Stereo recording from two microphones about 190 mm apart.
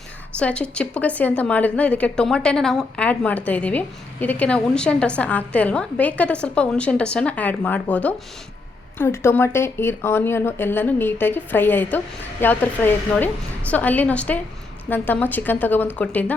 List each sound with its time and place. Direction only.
0.3 s a woman's voice: 5° left (ahead or behind)